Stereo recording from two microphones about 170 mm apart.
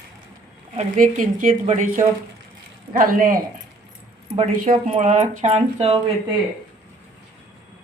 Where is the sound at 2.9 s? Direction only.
55° right (ahead or behind).